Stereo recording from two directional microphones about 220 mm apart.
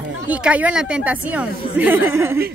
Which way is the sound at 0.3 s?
5° right (ahead or behind).